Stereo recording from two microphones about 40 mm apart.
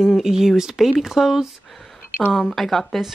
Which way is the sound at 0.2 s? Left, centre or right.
Centre.